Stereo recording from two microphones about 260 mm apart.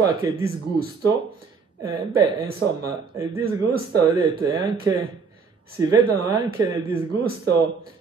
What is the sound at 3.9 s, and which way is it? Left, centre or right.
Speech, centre.